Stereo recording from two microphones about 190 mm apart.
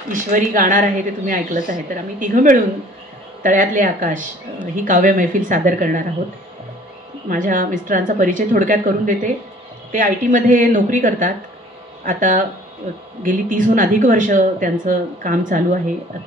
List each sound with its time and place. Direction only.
0.1 s a woman's voice: 45° right (ahead or behind)
7.2 s a woman's voice: 45° right (ahead or behind)